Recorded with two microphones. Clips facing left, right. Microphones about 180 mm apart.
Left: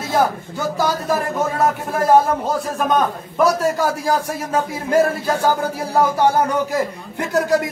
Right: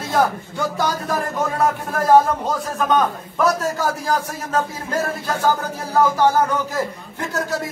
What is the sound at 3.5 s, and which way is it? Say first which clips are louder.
A man's voice: left 1 dB; 10° left (ahead or behind).